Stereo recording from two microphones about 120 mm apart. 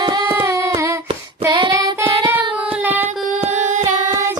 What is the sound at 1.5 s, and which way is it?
Child singing, 40° right (ahead or behind).